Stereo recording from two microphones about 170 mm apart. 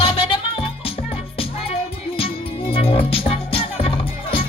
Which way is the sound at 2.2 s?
35° left (ahead or behind).